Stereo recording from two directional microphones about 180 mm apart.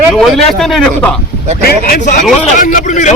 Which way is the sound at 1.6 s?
50° left (ahead or behind).